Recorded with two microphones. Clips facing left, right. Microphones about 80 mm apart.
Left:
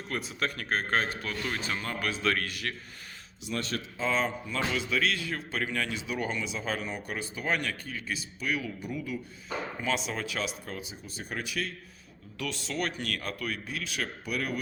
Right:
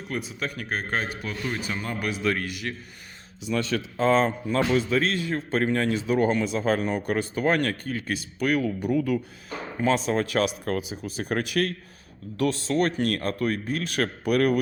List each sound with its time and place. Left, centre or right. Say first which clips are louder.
0.1 s a man's voice: right 2 dB; centre
3.9 s a man's voice: right 8 dB; right
9.8 s speech: right 11 dB; right
12.4 s a man's voice: right 10 dB; right